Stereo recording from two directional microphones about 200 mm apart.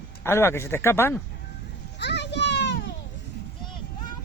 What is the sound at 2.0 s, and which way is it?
Children playing, 60° left (ahead or behind).